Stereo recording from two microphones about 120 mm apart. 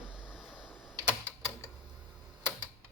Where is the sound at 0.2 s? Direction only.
10° right (ahead or behind).